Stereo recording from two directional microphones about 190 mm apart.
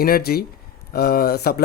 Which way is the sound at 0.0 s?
55° left (ahead or behind).